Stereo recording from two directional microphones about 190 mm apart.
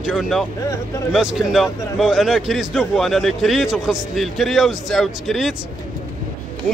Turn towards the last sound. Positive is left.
turn(degrees=0)  # may be behind; listen again after turning